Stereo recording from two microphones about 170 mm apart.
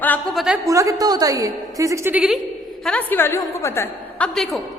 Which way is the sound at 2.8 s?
10° left (ahead or behind).